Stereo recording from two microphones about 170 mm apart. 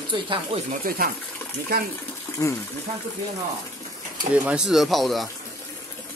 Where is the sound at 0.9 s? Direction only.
55° right (ahead or behind).